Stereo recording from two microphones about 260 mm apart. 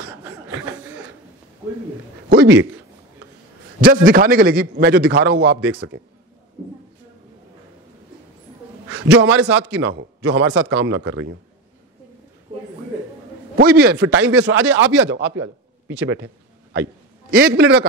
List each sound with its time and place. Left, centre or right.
2.2 s a man's voice: right
3.8 s a man's voice: right
9.0 s a man's voice: right
13.6 s a man's voice: right
17.3 s a man's voice: right